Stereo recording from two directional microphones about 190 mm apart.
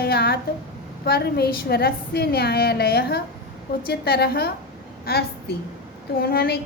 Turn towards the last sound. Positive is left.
turn(degrees=55)  # may be behind; listen again after turning